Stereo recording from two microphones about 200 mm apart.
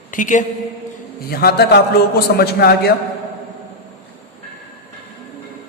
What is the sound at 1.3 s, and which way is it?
A man's voice, 50° left (ahead or behind).